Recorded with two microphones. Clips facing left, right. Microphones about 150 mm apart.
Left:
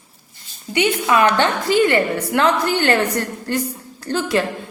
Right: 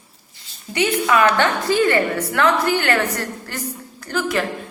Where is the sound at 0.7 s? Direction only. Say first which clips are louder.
Left 1 dB; 25° left (ahead or behind).